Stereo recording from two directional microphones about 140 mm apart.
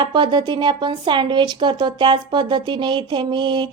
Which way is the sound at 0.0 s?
35° right (ahead or behind).